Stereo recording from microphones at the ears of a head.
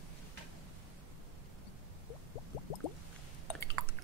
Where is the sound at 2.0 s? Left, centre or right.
Left.